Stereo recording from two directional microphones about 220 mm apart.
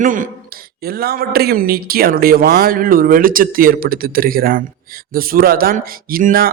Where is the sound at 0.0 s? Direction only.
35° right (ahead or behind).